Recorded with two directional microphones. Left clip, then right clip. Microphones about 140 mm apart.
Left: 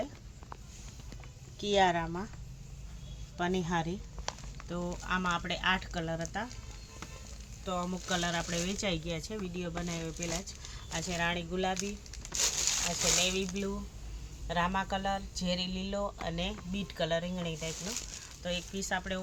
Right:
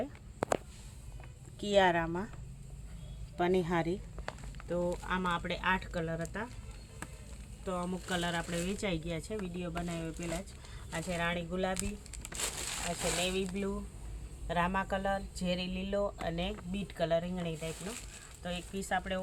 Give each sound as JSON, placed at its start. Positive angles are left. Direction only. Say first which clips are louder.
{"t": 1.6, "sound": "speech", "louder": "even", "side_deg": -55}
{"t": 3.3, "sound": "speech", "louder": "right 2 dB", "side_deg": -55}
{"t": 4.7, "sound": "speech", "louder": "right 1 dB", "side_deg": -35}
{"t": 7.6, "sound": "speech", "louder": "left 2 dB", "side_deg": -30}
{"t": 10.9, "sound": "speech", "louder": "left 1 dB", "side_deg": -20}
{"t": 12.3, "sound": "a sound", "louder": "left 7 dB", "side_deg": -10}
{"t": 13.1, "sound": "speech", "louder": "left 3 dB", "side_deg": -10}
{"t": 14.4, "sound": "speech", "louder": "left 1 dB", "side_deg": -25}
{"t": 17.8, "sound": "speech", "louder": "left 4 dB", "side_deg": -5}
{"t": 18.4, "sound": "speech", "louder": "left 3 dB", "side_deg": -20}